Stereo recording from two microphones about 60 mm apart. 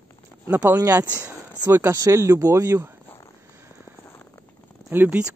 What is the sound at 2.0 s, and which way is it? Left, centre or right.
Speech, right.